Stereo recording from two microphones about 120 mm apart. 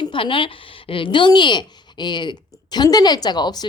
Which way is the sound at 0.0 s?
45° left (ahead or behind).